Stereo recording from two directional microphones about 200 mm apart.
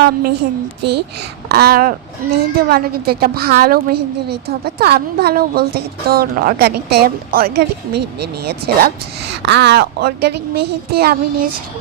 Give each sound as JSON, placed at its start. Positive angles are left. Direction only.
{"t": 0.0, "sound": "a woman's voice", "side_deg": -50}
{"t": 1.5, "sound": "a woman's voice", "side_deg": -50}